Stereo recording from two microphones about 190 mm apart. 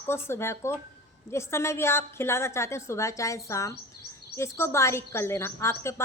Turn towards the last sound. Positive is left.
turn(degrees=15)  # may be behind; listen again after turning